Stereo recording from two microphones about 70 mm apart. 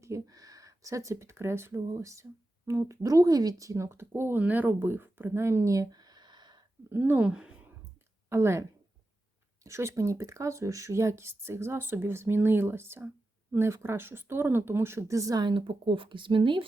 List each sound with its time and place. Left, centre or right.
0.0 s speech: right
1.9 s speech: right
6.9 s speech: right
7.3 s a woman's voice: centre
8.3 s speech: right
9.6 s speech: right